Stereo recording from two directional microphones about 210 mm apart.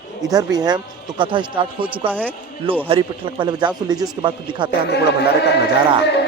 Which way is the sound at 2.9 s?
25° right (ahead or behind).